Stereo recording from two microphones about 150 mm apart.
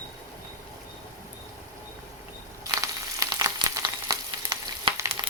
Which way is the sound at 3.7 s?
25° right (ahead or behind).